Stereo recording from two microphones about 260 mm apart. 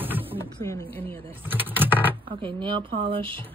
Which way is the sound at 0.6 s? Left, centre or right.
Centre.